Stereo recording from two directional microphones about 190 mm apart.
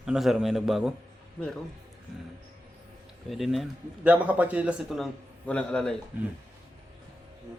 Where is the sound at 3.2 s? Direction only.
Centre (ahead or behind).